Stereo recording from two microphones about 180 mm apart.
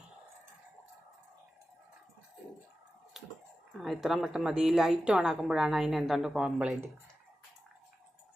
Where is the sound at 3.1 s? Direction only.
Centre (ahead or behind).